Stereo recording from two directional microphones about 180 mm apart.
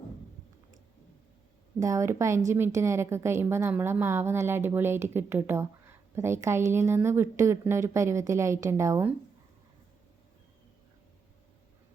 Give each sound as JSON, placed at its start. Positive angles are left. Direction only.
{"t": 1.8, "sound": "a woman's voice", "side_deg": -15}